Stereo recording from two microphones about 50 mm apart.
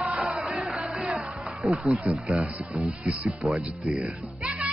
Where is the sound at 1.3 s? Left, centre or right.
Centre.